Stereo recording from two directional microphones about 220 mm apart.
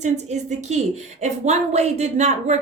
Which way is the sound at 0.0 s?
30° right (ahead or behind).